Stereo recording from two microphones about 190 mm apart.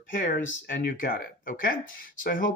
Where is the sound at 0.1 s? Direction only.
50° left (ahead or behind).